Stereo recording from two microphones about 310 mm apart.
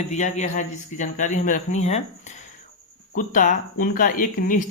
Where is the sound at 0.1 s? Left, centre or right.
Left.